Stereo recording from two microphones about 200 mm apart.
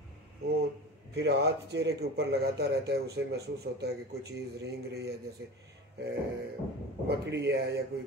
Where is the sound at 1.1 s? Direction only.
55° right (ahead or behind).